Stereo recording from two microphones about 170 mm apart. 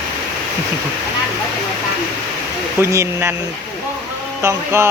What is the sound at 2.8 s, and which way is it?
Speech, 15° right (ahead or behind).